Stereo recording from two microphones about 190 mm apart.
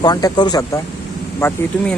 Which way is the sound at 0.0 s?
20° left (ahead or behind).